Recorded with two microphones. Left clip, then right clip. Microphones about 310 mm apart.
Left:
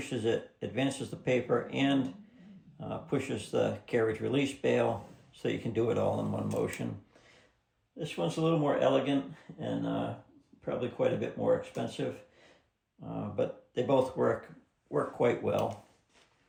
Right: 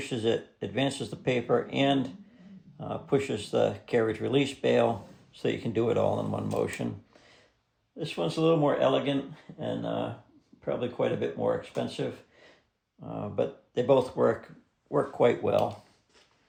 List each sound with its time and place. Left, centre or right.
0.0 s speech: right
7.9 s speech: right
10.7 s speech: right
13.1 s speech: right